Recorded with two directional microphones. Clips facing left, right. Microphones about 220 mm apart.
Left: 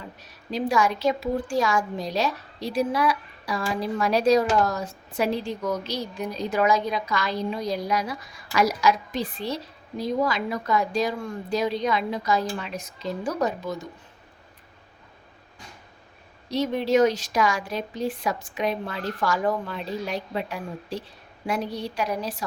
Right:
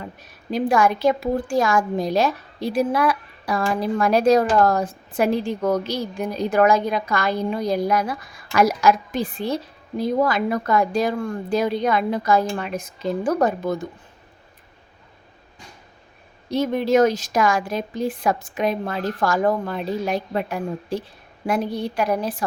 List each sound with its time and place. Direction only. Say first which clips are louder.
0.5 s a woman's voice: right 4 dB; 50° right (ahead or behind)
16.5 s a woman's voice: right 3 dB; 50° right (ahead or behind)